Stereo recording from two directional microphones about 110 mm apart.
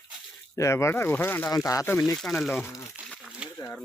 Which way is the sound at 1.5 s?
30° left (ahead or behind).